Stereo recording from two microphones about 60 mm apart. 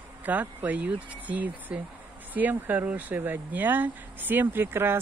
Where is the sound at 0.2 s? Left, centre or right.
Right.